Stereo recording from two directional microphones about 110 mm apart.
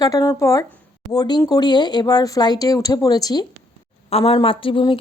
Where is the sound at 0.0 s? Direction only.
35° left (ahead or behind).